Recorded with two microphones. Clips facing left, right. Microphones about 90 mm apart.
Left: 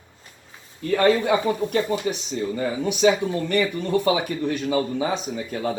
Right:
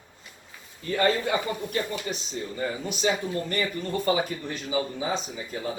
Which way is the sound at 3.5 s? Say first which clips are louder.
Left 7 dB; 80° left.